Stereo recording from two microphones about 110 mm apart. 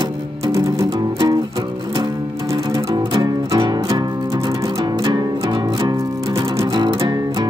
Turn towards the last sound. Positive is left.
turn(degrees=-45)  # may be behind; listen again after turning